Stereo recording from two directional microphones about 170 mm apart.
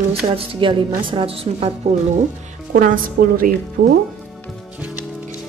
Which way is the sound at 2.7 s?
55° right (ahead or behind).